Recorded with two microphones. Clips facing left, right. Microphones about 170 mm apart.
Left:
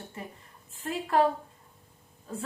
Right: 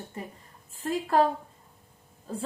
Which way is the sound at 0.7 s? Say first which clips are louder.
Right 2 dB; 35° right (ahead or behind).